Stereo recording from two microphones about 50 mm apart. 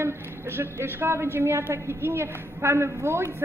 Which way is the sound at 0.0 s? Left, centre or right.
Right.